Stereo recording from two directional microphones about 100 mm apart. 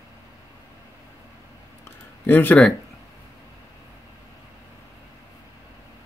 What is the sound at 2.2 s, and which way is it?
Speech, 20° left (ahead or behind).